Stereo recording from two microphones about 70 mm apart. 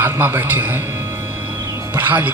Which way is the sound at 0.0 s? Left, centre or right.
Right.